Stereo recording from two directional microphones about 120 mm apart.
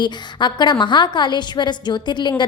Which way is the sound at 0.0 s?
40° left (ahead or behind).